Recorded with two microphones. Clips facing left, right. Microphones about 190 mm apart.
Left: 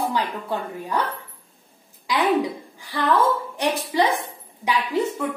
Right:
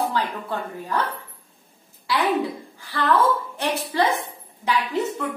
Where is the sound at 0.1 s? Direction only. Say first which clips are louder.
Left 1 dB; 15° left (ahead or behind).